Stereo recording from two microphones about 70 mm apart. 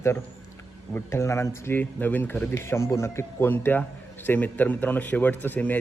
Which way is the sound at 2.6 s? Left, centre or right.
Left.